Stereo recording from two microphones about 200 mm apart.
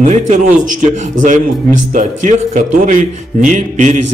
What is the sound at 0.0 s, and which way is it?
A man's voice, 40° right (ahead or behind).